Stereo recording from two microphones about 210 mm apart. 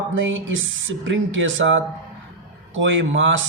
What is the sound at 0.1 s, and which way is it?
Speech, 65° right (ahead or behind).